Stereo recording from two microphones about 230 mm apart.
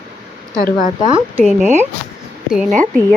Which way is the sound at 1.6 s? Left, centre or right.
Centre.